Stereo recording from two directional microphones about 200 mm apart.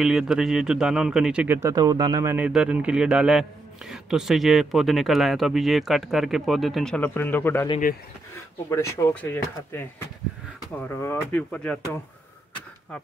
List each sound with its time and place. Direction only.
0.0 s a man's voice: centre (ahead or behind)
8.6 s speech: 15° left (ahead or behind)